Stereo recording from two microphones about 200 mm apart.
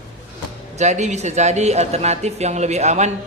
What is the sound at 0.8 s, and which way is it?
A man's voice, 35° right (ahead or behind).